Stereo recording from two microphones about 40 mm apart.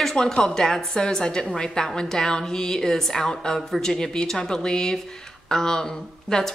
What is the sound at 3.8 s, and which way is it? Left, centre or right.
A woman's voice, centre.